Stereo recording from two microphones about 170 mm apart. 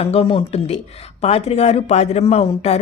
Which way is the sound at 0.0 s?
35° left (ahead or behind).